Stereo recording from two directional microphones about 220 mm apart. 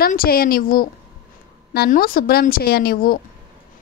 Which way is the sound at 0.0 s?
40° left (ahead or behind).